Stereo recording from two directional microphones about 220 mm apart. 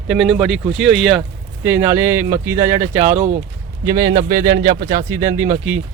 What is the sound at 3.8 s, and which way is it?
Speech, 20° right (ahead or behind).